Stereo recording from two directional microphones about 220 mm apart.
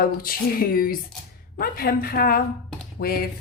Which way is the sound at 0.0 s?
40° left (ahead or behind).